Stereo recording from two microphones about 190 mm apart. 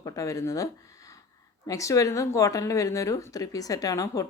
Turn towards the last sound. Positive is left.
turn(degrees=15)  # may be behind; listen again after turning